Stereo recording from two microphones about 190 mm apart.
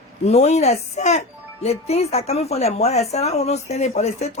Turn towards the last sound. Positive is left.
turn(degrees=35)  # may be behind; listen again after turning